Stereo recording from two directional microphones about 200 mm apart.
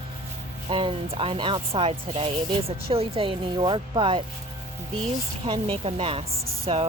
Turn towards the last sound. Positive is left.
turn(degrees=-30)  # may be behind; listen again after turning